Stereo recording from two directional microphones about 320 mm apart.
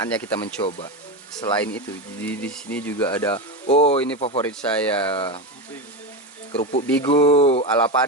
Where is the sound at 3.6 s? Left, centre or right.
Centre.